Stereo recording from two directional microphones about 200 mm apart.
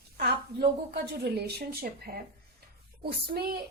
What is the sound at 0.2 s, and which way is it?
A woman's voice, 50° right (ahead or behind).